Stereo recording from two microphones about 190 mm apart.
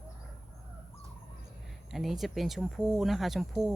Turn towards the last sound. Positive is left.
turn(degrees=0)  # may be behind; listen again after turning